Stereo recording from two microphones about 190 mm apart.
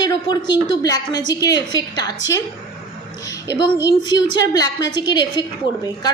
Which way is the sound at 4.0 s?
20° left (ahead or behind).